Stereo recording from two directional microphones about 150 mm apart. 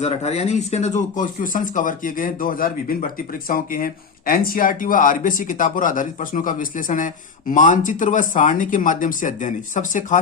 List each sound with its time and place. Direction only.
0.0 s speech: 45° left (ahead or behind)